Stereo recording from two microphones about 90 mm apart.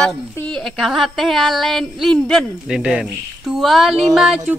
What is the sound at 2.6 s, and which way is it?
Speech, 10° right (ahead or behind).